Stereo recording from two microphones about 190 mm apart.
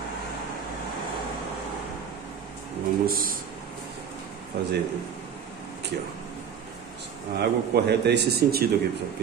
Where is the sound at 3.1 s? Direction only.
50° right (ahead or behind).